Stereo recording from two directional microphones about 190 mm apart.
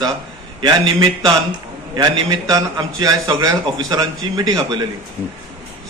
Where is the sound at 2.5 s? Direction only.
20° right (ahead or behind).